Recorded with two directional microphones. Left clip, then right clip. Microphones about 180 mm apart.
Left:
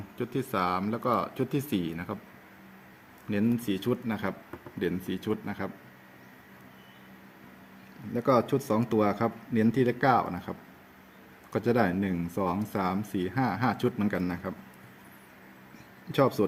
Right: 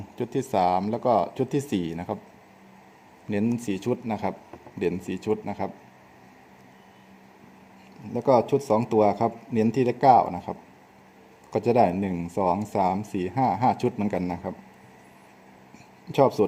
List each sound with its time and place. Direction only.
0.2 s speech: 25° right (ahead or behind)
3.2 s speech: 20° right (ahead or behind)
8.1 s speech: 15° right (ahead or behind)
11.5 s speech: 15° right (ahead or behind)
16.1 s speech: 15° right (ahead or behind)